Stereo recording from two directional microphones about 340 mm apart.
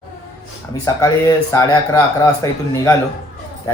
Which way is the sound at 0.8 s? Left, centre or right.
Centre.